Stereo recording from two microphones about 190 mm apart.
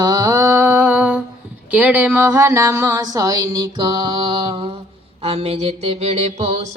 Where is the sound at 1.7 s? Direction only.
10° right (ahead or behind); by 4.7 s 25° right (ahead or behind).